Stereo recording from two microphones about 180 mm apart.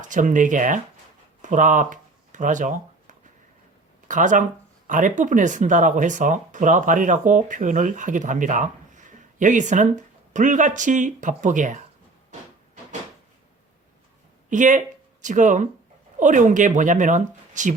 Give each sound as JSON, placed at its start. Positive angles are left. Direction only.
{"t": 0.0, "sound": "speech", "side_deg": -45}
{"t": 1.4, "sound": "a sound", "side_deg": -45}
{"t": 4.1, "sound": "speech", "side_deg": -45}
{"t": 14.5, "sound": "speech", "side_deg": -45}